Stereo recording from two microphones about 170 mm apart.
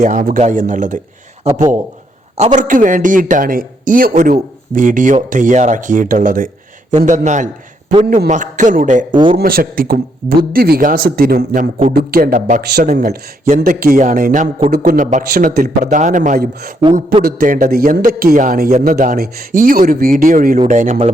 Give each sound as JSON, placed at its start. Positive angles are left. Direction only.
{"t": 0.0, "sound": "speech", "side_deg": -50}
{"t": 1.5, "sound": "a man's voice", "side_deg": -40}
{"t": 8.0, "sound": "a man's voice", "side_deg": -65}
{"t": 8.3, "sound": "speech", "side_deg": -45}
{"t": 9.1, "sound": "speech", "side_deg": -30}
{"t": 9.4, "sound": "a man's voice", "side_deg": -60}
{"t": 13.7, "sound": "a man's voice", "side_deg": -60}
{"t": 16.4, "sound": "speech", "side_deg": -65}
{"t": 17.2, "sound": "a man's voice", "side_deg": -55}